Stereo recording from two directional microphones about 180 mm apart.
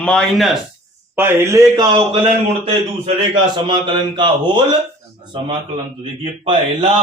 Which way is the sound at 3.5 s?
25° right (ahead or behind).